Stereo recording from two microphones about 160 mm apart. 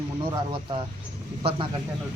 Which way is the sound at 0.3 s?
30° right (ahead or behind).